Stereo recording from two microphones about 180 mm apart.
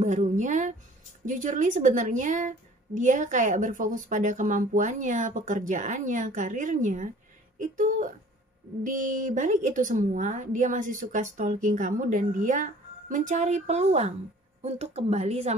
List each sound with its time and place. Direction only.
0.0 s a woman's voice: 40° right (ahead or behind)